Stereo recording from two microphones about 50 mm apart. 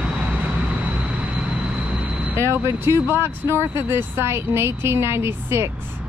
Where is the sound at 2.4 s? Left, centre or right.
Right.